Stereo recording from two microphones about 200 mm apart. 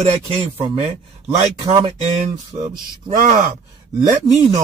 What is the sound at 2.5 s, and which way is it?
Speech, 15° right (ahead or behind).